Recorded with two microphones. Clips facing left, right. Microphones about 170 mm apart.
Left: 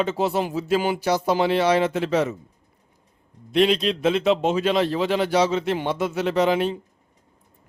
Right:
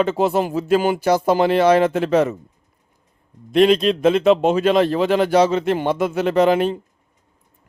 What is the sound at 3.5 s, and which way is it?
Speech, 50° right (ahead or behind).